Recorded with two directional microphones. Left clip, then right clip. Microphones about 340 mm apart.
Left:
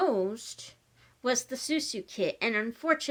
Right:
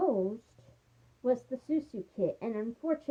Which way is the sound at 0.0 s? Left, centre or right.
Left.